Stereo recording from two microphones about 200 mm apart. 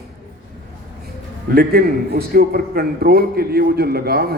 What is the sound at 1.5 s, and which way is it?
A man's voice, 50° right (ahead or behind).